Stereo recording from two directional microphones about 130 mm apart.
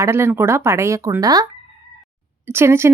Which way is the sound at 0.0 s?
20° right (ahead or behind).